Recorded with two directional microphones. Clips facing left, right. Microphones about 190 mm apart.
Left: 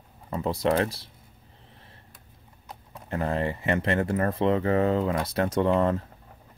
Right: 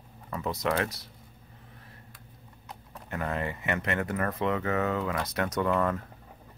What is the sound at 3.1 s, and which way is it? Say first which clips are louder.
Speech: left 5 dB; 30° left (ahead or behind).